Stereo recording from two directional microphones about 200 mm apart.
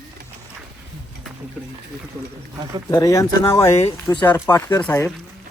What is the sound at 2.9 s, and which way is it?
Speech, 15° left (ahead or behind).